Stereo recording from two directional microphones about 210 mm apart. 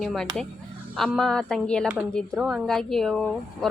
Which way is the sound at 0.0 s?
Centre (ahead or behind).